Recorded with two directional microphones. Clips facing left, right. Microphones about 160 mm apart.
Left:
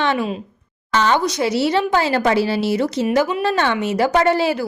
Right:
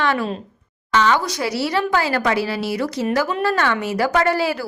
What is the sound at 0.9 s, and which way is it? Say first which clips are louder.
Speech: even; 35° left (ahead or behind).